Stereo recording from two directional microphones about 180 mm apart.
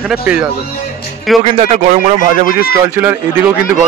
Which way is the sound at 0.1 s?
5° right (ahead or behind).